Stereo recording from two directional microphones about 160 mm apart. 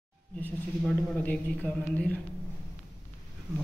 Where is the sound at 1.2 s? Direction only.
10° left (ahead or behind).